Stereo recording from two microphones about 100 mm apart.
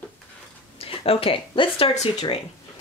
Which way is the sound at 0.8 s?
75° left (ahead or behind).